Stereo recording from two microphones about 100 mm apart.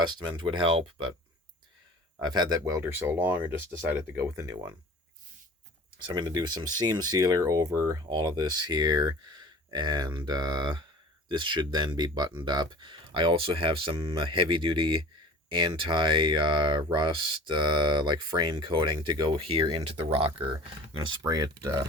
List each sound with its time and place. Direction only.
0.0 s speech: 50° right (ahead or behind)
2.2 s speech: 45° right (ahead or behind)
2.8 s speech: 20° right (ahead or behind)
6.1 s speech: 45° right (ahead or behind)
8.1 s speech: 45° right (ahead or behind)
19.6 s speech: 60° right (ahead or behind)
21.0 s speech: 45° right (ahead or behind)